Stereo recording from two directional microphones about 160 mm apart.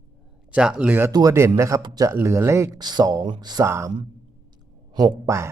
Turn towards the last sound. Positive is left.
turn(degrees=-20)  # may be behind; listen again after turning